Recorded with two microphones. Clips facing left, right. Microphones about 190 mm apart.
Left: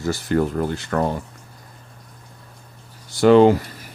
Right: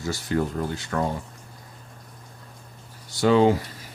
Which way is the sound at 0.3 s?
60° left (ahead or behind).